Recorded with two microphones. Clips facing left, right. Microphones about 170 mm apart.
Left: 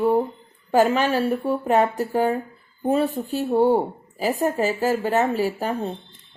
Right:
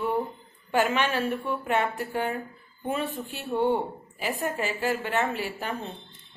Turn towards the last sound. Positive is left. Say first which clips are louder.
# left 8 dB
turn(degrees=40)  # may be behind; listen again after turning